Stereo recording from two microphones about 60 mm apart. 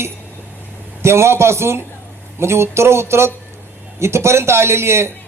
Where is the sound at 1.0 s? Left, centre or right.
Right.